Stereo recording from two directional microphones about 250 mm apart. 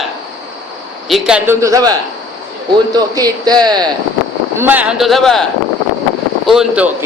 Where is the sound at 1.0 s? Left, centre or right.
Centre.